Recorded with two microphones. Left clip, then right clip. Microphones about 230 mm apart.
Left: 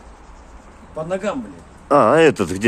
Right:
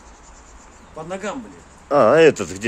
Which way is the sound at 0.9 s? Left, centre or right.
Centre.